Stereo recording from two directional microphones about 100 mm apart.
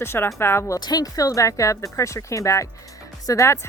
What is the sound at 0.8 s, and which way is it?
Speech, 40° left (ahead or behind).